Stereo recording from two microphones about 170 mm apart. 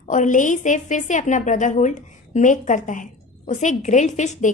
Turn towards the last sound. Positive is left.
turn(degrees=45)  # may be behind; listen again after turning